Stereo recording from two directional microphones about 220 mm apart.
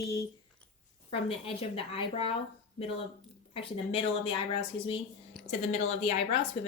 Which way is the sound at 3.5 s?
25° left (ahead or behind).